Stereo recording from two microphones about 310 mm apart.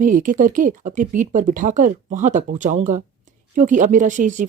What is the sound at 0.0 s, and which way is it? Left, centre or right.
Speech, right.